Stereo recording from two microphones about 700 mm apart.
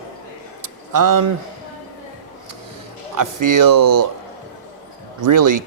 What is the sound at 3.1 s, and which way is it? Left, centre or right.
Speech, right.